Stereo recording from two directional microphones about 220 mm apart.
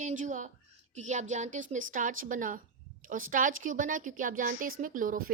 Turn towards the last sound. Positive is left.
turn(degrees=-40)  # may be behind; listen again after turning